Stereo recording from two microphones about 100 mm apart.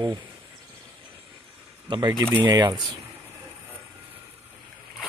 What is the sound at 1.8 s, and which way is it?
Speech, 45° right (ahead or behind).